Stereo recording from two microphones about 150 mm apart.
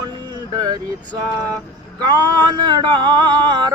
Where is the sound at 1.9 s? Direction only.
30° right (ahead or behind).